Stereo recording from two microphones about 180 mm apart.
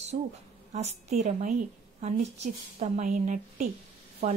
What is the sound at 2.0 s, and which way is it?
Speech, 35° right (ahead or behind).